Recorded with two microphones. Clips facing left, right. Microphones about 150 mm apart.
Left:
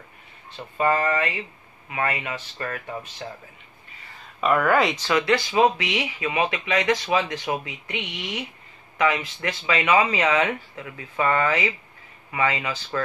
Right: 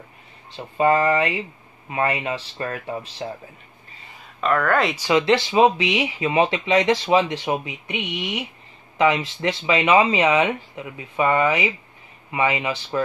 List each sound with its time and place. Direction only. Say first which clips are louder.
0.6 s speech: right 4 dB; 25° right (ahead or behind)
4.4 s speech: even; 5° left (ahead or behind)
4.9 s speech: right 4 dB; 15° right (ahead or behind)
5.2 s speech: right 2 dB; 25° right (ahead or behind)
8.9 s speech: right 4 dB; 25° right (ahead or behind)